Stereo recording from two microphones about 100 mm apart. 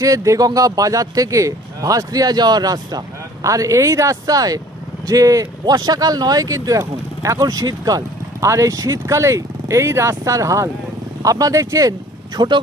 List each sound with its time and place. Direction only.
0.0 s speech: 35° right (ahead or behind)
12.4 s speech: 50° right (ahead or behind)